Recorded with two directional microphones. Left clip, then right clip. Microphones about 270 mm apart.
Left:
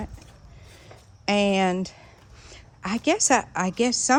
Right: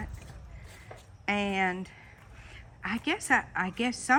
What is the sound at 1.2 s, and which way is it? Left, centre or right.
A woman's voice, centre.